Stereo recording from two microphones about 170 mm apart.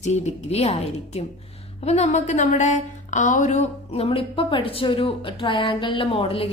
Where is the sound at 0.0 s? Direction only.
40° left (ahead or behind).